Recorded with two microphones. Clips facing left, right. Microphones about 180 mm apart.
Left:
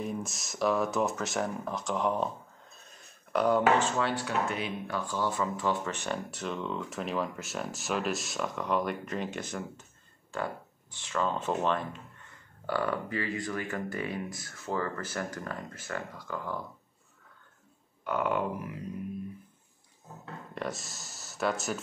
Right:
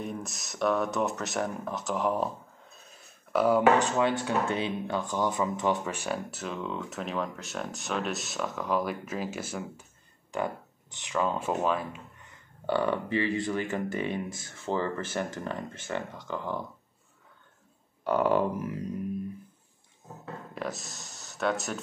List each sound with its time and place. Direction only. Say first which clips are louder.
0.0 s speech: left 1 dB; centre (ahead or behind)
2.8 s a sound: right 1 dB; 5° right (ahead or behind)
3.8 s speech: right 3 dB; 20° right (ahead or behind)
12.2 s speech: right 2 dB; 20° right (ahead or behind)
18.0 s a sound: right 5 dB; 35° right (ahead or behind)
20.5 s speech: even; centre (ahead or behind)